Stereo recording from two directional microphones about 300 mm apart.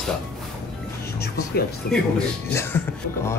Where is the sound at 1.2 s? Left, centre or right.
Left.